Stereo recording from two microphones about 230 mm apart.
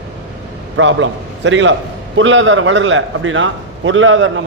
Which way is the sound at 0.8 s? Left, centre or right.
Right.